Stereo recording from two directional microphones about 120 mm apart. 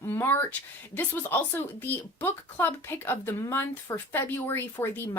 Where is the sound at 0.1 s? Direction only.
20° left (ahead or behind).